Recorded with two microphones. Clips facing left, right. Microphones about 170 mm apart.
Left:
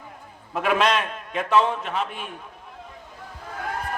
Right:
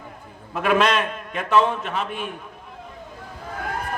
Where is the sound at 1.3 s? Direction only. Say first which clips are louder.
Right 1 dB; 60° right (ahead or behind).